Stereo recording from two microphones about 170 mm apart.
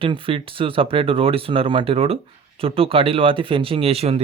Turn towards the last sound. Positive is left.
turn(degrees=-35)  # may be behind; listen again after turning